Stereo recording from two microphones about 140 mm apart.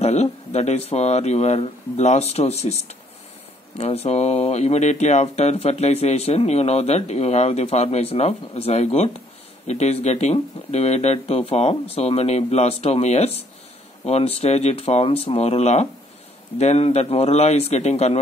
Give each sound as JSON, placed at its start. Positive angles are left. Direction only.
{"t": 0.0, "sound": "speech", "side_deg": 50}